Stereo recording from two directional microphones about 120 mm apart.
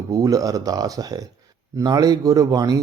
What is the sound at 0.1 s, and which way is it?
Speech, 30° right (ahead or behind).